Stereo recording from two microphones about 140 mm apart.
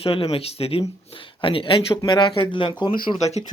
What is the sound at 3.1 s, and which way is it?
Speech, 55° left (ahead or behind).